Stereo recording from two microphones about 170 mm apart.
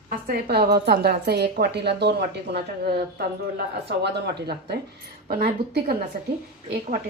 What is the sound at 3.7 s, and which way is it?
A woman's voice, 80° right.